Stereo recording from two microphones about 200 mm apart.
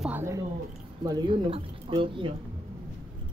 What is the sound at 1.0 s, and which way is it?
Speech, 20° right (ahead or behind).